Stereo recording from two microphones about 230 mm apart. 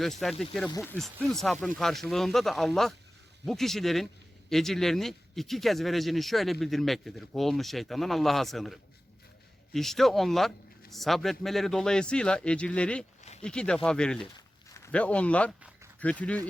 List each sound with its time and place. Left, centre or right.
0.0 s speech: centre